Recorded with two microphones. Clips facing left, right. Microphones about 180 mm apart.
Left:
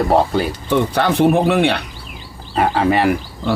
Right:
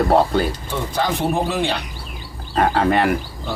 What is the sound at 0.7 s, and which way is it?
Speech, 65° left (ahead or behind).